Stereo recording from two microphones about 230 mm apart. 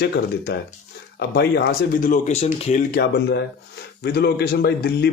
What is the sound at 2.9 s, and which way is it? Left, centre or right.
Speech, left.